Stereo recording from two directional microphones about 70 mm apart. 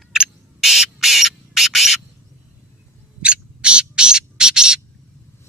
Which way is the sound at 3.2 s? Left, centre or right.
Centre.